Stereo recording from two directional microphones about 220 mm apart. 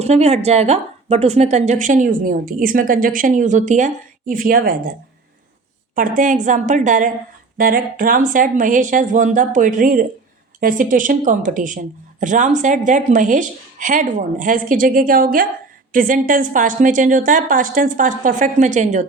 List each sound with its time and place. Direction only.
0.0 s a woman's voice: 30° right (ahead or behind)
5.9 s a woman's voice: 35° right (ahead or behind)